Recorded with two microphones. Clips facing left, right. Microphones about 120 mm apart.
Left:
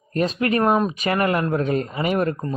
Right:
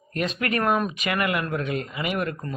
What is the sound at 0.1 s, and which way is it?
Speech, 35° left (ahead or behind).